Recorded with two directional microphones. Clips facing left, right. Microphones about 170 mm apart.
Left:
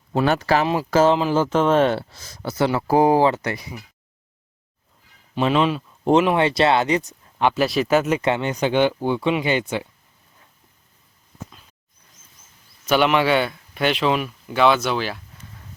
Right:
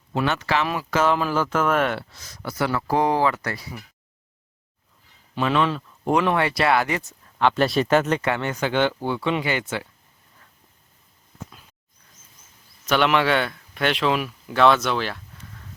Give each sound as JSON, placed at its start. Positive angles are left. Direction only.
{"t": 0.1, "sound": "speech", "side_deg": 35}
{"t": 5.3, "sound": "speech", "side_deg": 20}
{"t": 7.5, "sound": "speech", "side_deg": 5}
{"t": 8.2, "sound": "speech", "side_deg": 20}
{"t": 12.8, "sound": "speech", "side_deg": 0}